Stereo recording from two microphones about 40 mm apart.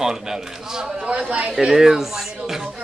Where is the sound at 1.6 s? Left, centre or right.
Centre.